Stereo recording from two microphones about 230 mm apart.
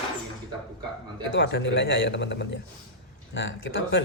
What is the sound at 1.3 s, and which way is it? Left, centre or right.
Speech, left.